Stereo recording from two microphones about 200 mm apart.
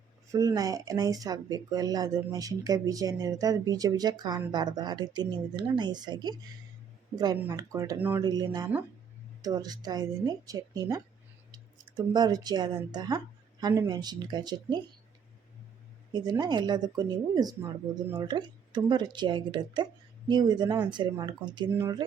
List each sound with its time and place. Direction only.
0.3 s speech: 15° right (ahead or behind)
8.2 s speech: 20° right (ahead or behind)
16.1 s speech: 20° right (ahead or behind)